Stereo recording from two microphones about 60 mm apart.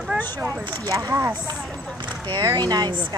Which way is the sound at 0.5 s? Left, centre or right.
Right.